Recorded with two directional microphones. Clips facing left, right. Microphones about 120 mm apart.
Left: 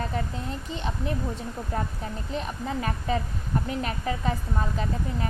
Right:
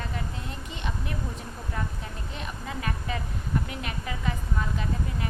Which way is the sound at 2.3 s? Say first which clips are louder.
Left 7 dB; 35° left (ahead or behind).